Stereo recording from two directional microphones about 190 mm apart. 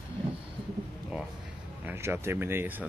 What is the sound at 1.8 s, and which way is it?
Speech, 10° right (ahead or behind).